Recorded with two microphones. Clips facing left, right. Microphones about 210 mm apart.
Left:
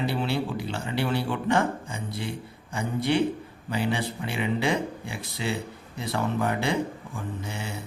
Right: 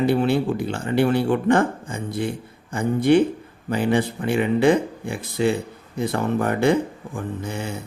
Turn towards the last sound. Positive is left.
turn(degrees=-50)  # may be behind; listen again after turning